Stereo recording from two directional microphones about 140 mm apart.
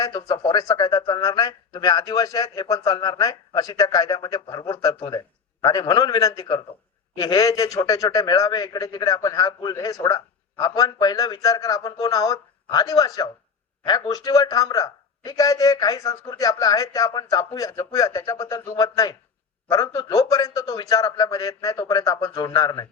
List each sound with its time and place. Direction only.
0.0 s a man's voice: 30° left (ahead or behind)